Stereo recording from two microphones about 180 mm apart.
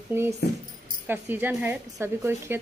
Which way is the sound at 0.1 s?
15° right (ahead or behind).